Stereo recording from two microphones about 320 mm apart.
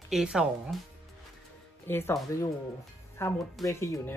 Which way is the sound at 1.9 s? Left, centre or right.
Centre.